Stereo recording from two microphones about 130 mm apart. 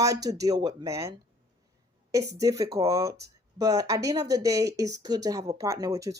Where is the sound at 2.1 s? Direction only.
25° right (ahead or behind).